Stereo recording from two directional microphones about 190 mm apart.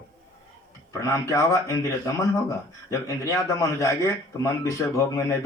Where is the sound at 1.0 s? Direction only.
15° left (ahead or behind).